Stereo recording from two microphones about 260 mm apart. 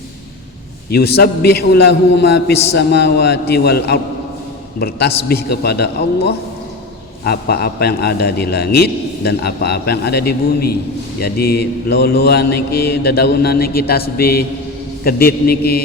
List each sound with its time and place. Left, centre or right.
0.9 s a man's voice: left